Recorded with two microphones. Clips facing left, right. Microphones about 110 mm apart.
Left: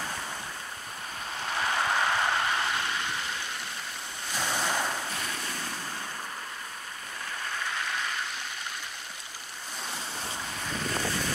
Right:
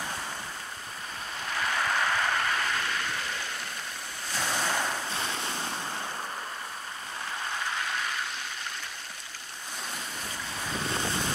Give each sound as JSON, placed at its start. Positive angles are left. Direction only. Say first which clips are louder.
{"t": 1.6, "sound": "vehicle", "louder": "left 1 dB", "side_deg": 20}
{"t": 4.5, "sound": "waves", "louder": "even", "side_deg": 5}
{"t": 5.1, "sound": "waves", "louder": "right 2 dB", "side_deg": -25}
{"t": 10.9, "sound": "vehicle", "louder": "even", "side_deg": -25}